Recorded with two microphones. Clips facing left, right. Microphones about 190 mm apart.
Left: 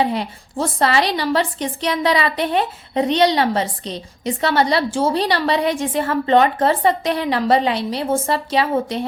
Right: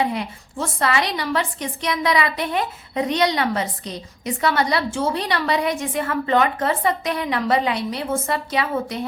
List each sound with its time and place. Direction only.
0.0 s a woman's voice: 30° left (ahead or behind)